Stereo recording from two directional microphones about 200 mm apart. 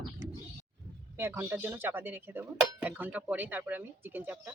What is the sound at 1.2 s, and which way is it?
Speech, 10° right (ahead or behind).